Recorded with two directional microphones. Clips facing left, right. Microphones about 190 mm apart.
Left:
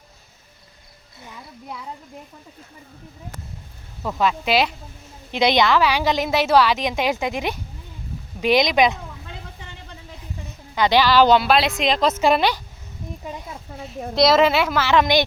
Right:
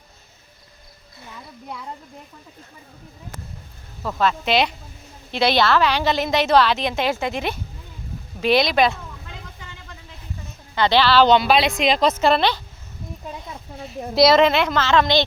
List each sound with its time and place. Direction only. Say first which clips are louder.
4.0 s a woman's voice: even; 10° left (ahead or behind)
5.3 s a woman's voice: left 1 dB; 15° left (ahead or behind)
10.8 s speech: even; 10° left (ahead or behind)
12.2 s a woman's voice: even; 10° left (ahead or behind)
13.2 s speech: even; centre (ahead or behind)